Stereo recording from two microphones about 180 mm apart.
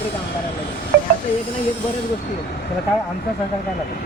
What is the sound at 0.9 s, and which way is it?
Train, 70° right (ahead or behind).